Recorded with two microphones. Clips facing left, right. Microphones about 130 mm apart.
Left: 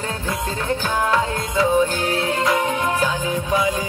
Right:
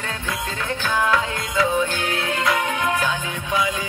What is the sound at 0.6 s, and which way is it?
Music, 35° left (ahead or behind).